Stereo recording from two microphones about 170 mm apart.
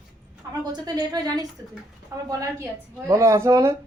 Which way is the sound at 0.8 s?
20° right (ahead or behind).